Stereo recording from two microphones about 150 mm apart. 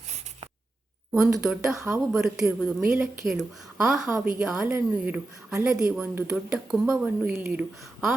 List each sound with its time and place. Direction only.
1.1 s a woman's voice: 5° right (ahead or behind)
1.7 s a woman's voice: 20° right (ahead or behind)
2.1 s a woman's voice: 5° right (ahead or behind)